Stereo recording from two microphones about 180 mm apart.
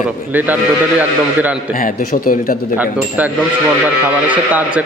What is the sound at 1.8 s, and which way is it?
Speech, 50° left (ahead or behind).